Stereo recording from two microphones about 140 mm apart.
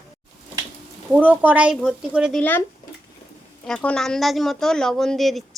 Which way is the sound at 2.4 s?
15° left (ahead or behind).